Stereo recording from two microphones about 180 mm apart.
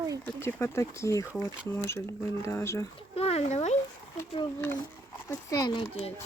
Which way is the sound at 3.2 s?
35° left (ahead or behind).